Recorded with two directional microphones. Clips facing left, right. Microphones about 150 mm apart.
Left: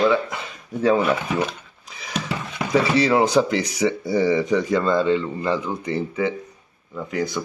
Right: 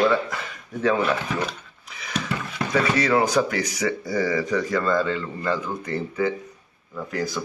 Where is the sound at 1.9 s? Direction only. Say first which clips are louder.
Left 1 dB; 30° left (ahead or behind).